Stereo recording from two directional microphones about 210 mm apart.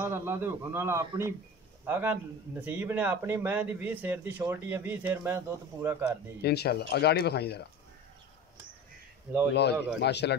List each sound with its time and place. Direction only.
0.0 s a man's voice: 10° right (ahead or behind)
6.4 s speech: 50° left (ahead or behind)
9.5 s speech: 55° left (ahead or behind)